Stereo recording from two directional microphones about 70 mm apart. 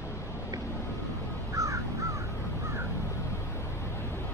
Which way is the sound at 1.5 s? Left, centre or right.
Right.